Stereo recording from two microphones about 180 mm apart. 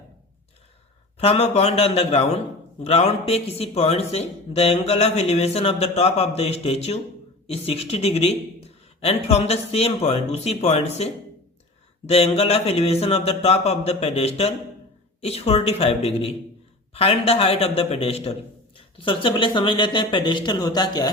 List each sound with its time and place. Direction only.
1.2 s a man's voice: 35° left (ahead or behind)